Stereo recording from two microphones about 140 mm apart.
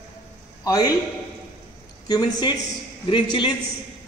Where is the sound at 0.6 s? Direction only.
25° left (ahead or behind).